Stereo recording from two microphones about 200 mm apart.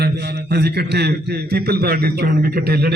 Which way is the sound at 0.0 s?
55° right (ahead or behind).